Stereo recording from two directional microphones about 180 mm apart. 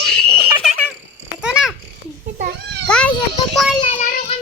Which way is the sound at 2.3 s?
55° right (ahead or behind).